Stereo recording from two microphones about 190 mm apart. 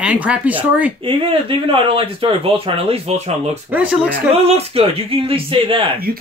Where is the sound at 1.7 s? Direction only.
30° right (ahead or behind).